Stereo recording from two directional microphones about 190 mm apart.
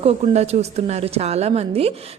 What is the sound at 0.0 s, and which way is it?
A woman's voice, 35° right (ahead or behind).